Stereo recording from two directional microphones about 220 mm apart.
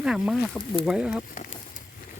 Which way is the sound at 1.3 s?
35° left (ahead or behind).